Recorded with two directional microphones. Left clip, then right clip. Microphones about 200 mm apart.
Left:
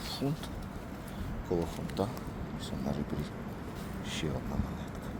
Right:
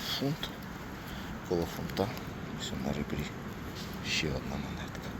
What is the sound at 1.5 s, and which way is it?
Speech, 10° left (ahead or behind).